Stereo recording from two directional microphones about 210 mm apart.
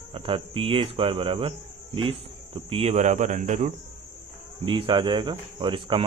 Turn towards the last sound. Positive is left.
turn(degrees=-25)  # may be behind; listen again after turning